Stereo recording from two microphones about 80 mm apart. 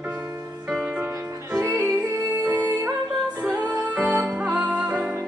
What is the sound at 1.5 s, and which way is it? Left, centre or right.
Music, right.